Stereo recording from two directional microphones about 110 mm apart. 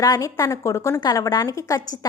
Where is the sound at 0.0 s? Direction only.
30° left (ahead or behind).